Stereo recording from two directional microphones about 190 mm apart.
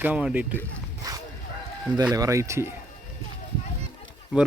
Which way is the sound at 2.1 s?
15° right (ahead or behind).